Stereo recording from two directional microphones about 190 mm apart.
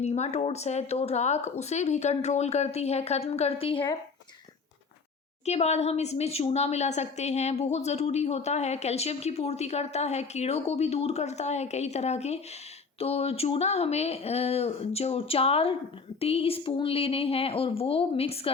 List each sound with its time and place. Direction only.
0.0 s a woman's voice: 35° left (ahead or behind)
5.5 s a woman's voice: 35° left (ahead or behind)